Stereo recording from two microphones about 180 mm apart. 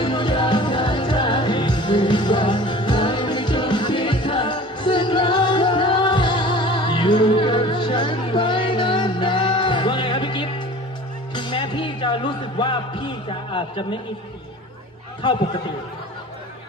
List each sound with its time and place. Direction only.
0.0 s music: 25° left (ahead or behind)
15.2 s a man's voice: 25° left (ahead or behind)